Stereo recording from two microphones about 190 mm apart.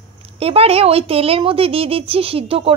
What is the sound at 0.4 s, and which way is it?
A woman's voice, 30° right (ahead or behind).